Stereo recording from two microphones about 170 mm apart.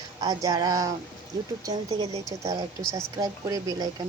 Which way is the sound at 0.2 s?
20° right (ahead or behind).